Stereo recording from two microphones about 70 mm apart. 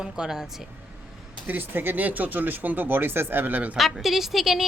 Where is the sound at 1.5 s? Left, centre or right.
Right.